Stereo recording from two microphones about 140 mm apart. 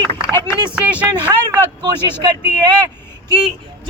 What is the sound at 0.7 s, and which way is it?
Speech, 10° right (ahead or behind).